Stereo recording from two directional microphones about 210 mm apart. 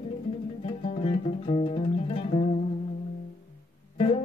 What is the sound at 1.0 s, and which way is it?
Music, 25° left (ahead or behind).